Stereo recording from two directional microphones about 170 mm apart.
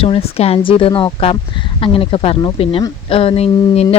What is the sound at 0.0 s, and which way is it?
Speech, 35° left (ahead or behind).